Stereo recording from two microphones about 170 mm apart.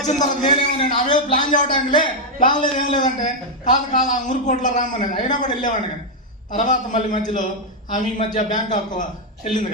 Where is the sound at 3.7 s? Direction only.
50° left (ahead or behind).